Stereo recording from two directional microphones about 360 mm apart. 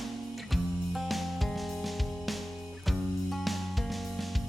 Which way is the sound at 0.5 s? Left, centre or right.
Centre.